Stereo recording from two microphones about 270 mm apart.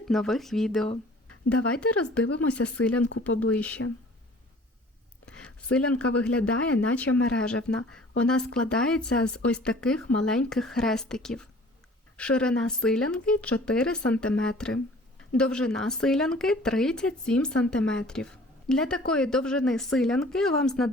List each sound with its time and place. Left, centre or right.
0.1 s speech: centre
2.2 s speech: left
3.2 s speech: centre
5.2 s a sound: centre
5.7 s speech: centre